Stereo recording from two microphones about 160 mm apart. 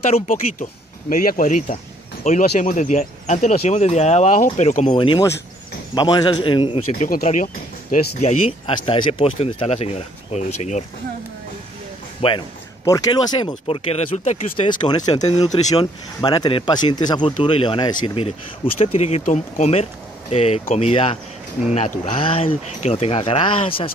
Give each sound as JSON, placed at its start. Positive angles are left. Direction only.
{"t": 0.3, "sound": "speech", "side_deg": 55}
{"t": 4.9, "sound": "speech", "side_deg": 30}
{"t": 6.9, "sound": "speech", "side_deg": 55}
{"t": 8.2, "sound": "speech", "side_deg": 40}
{"t": 12.2, "sound": "speech", "side_deg": 35}
{"t": 14.7, "sound": "speech", "side_deg": 25}
{"t": 21.7, "sound": "speech", "side_deg": 50}
{"t": 22.1, "sound": "speech", "side_deg": 35}